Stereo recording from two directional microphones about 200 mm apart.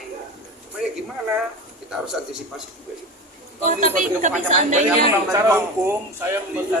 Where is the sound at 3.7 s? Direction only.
40° right (ahead or behind).